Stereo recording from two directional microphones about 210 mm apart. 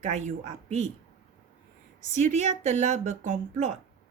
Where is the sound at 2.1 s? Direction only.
35° right (ahead or behind).